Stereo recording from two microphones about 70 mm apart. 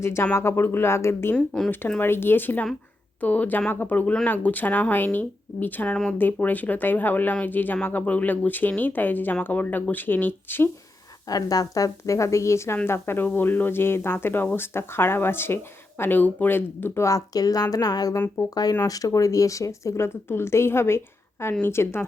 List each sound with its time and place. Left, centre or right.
0.0 s speech: left
11.3 s speech: left
17.0 s a woman's voice: left